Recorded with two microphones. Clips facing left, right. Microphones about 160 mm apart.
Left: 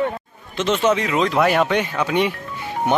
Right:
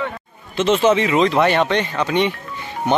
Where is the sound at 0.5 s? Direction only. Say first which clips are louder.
Right 3 dB; centre (ahead or behind).